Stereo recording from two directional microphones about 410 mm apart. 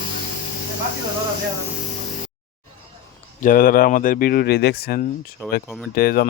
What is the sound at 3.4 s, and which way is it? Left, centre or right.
Speech, left.